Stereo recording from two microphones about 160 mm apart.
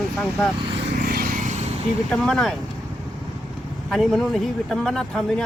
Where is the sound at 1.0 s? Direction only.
70° right (ahead or behind).